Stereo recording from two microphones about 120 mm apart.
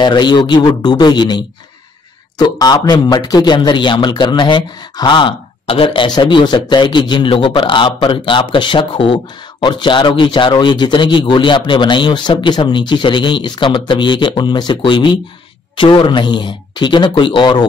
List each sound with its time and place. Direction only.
0.0 s speech: 40° left (ahead or behind)